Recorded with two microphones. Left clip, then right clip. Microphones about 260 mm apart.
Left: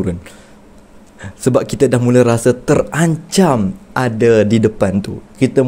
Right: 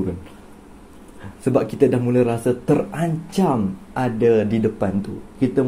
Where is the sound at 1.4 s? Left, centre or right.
Left.